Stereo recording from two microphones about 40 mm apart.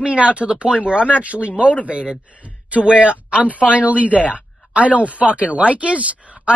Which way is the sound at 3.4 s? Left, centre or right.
Left.